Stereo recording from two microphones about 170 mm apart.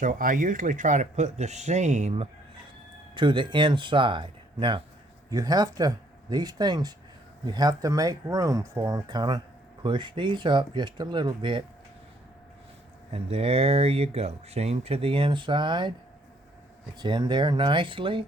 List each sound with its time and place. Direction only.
0.0 s speech: 50° right (ahead or behind)
3.2 s speech: 30° right (ahead or behind)
13.1 s speech: 35° right (ahead or behind)
17.0 s speech: 25° right (ahead or behind)